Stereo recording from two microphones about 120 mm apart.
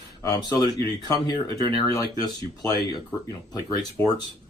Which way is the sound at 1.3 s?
35° left (ahead or behind).